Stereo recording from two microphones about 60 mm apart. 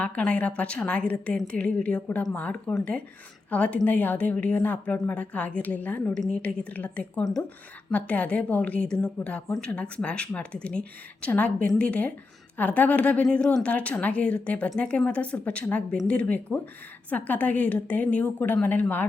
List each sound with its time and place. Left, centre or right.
0.2 s a woman's voice: left
6.1 s speech: centre
6.4 s a woman's voice: left